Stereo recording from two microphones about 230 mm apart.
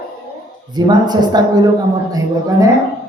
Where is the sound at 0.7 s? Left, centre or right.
Centre.